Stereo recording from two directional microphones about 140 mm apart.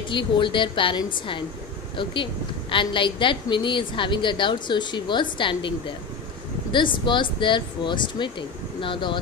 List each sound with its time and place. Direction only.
0.1 s a woman's voice: 35° left (ahead or behind)
2.7 s a woman's voice: 35° left (ahead or behind)